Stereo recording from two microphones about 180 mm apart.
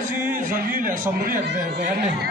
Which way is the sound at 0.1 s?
10° right (ahead or behind).